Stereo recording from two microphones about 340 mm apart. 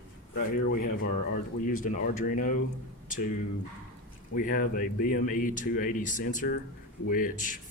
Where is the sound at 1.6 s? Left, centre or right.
Left.